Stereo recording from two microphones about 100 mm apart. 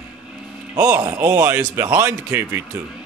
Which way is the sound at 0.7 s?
20° right (ahead or behind).